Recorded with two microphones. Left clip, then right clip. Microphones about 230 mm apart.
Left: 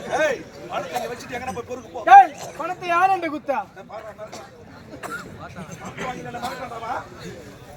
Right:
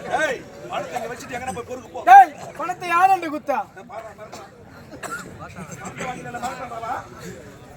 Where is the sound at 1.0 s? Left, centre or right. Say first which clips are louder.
Even; centre.